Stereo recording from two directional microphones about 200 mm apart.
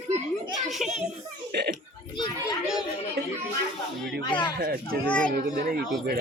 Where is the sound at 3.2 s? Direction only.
55° right (ahead or behind).